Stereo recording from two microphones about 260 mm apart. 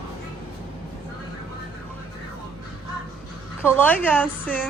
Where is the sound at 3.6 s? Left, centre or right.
Centre.